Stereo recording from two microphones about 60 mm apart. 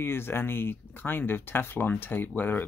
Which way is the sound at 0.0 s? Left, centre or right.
Left.